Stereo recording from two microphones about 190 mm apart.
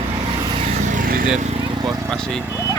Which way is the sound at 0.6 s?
40° right (ahead or behind).